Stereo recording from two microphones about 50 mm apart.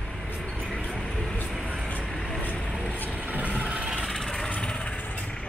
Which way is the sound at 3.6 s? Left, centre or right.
Right.